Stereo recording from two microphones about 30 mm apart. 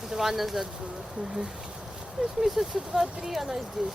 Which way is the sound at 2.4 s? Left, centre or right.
Centre.